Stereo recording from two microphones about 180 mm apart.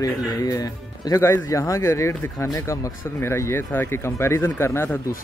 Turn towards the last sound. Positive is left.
turn(degrees=15)  # may be behind; listen again after turning